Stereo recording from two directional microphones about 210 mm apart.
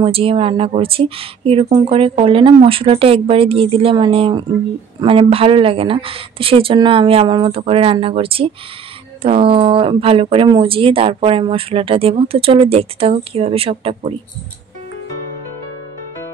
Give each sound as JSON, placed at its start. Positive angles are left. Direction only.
{"t": 0.0, "sound": "speech", "side_deg": -25}